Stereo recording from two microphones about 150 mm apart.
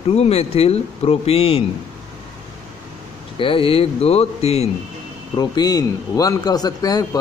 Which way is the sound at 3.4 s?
35° left (ahead or behind).